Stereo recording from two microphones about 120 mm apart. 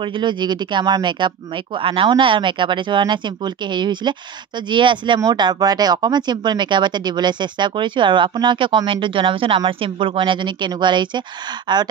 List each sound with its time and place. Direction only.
0.0 s speech: 40° right (ahead or behind)